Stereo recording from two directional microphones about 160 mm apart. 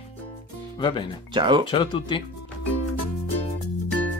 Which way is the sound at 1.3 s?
30° right (ahead or behind).